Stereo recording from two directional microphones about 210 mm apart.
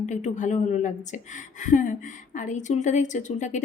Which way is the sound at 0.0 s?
35° left (ahead or behind).